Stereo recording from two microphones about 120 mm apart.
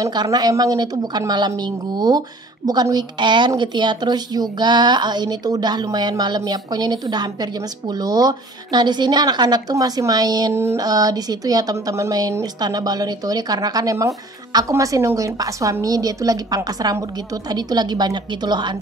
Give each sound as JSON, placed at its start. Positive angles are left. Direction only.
{"t": 0.0, "sound": "a woman's voice", "side_deg": -35}
{"t": 10.5, "sound": "mantra", "side_deg": -20}
{"t": 10.8, "sound": "a woman's voice", "side_deg": -30}